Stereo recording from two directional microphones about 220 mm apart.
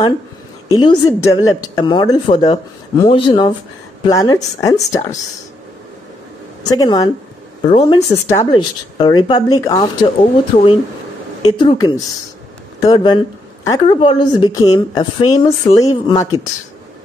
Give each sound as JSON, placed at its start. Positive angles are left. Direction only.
{"t": 0.7, "sound": "a woman's voice", "side_deg": 15}
{"t": 6.7, "sound": "a woman's voice", "side_deg": 15}
{"t": 8.3, "sound": "speech", "side_deg": 15}